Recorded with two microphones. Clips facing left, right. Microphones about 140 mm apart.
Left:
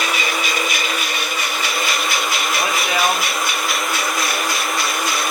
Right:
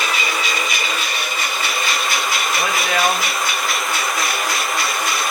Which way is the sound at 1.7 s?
Centre (ahead or behind).